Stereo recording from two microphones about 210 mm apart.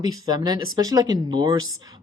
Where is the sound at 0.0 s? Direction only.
20° right (ahead or behind).